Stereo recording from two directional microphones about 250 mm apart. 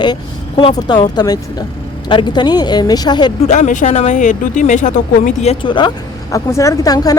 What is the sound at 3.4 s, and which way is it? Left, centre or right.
Speech, left.